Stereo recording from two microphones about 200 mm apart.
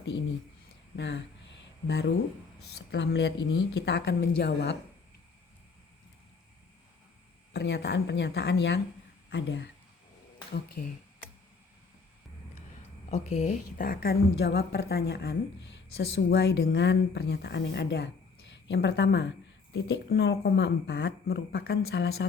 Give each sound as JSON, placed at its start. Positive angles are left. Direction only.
{"t": 0.9, "sound": "a sound", "side_deg": 60}
{"t": 2.6, "sound": "speech", "side_deg": 55}
{"t": 7.5, "sound": "speech", "side_deg": 55}
{"t": 10.8, "sound": "a woman's voice", "side_deg": 40}
{"t": 13.1, "sound": "a woman's voice", "side_deg": 35}